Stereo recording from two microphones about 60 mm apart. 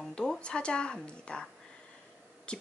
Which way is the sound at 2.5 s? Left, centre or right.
Centre.